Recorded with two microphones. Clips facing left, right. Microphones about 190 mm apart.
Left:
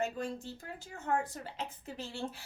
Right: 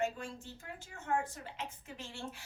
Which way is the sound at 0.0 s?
35° left (ahead or behind).